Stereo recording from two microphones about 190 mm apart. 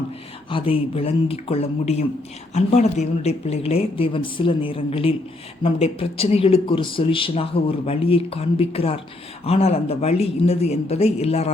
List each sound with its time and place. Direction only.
0.5 s a woman's voice: 30° left (ahead or behind)